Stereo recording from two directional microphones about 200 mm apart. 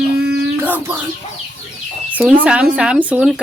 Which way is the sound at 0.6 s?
10° right (ahead or behind).